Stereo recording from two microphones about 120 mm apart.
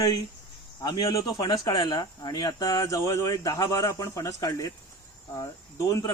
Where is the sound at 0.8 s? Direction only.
40° left (ahead or behind).